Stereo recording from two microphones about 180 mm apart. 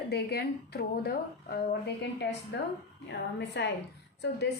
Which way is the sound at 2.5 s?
75° left (ahead or behind).